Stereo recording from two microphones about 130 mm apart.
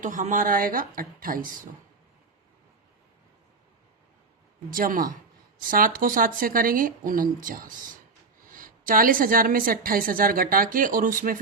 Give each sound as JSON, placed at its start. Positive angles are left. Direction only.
{"t": 0.0, "sound": "a woman's voice", "side_deg": -90}
{"t": 4.7, "sound": "a woman's voice", "side_deg": -90}